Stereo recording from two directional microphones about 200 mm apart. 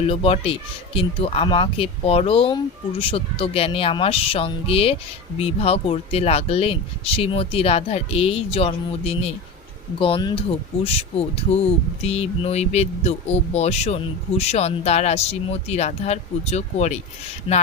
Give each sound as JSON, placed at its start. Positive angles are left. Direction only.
{"t": 0.0, "sound": "speech", "side_deg": 30}